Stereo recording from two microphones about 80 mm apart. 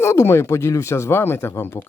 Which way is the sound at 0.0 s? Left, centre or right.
Left.